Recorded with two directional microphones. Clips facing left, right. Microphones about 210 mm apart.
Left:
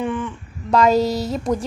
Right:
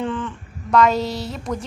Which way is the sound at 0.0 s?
10° left (ahead or behind).